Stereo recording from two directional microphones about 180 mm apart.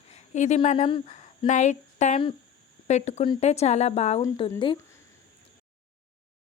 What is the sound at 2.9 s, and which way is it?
A woman's voice, 40° left (ahead or behind).